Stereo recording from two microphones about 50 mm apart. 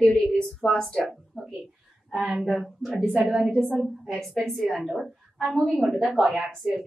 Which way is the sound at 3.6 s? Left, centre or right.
Centre.